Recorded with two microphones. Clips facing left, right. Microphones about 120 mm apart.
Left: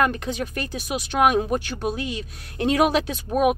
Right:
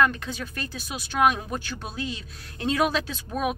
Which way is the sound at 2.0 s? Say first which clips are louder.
Left 3 dB; 65° left (ahead or behind).